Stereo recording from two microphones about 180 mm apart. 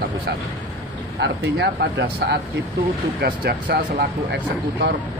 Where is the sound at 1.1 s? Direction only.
70° right (ahead or behind).